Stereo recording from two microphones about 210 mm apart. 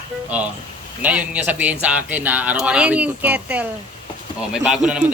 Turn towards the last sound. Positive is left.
turn(degrees=-5)  # may be behind; listen again after turning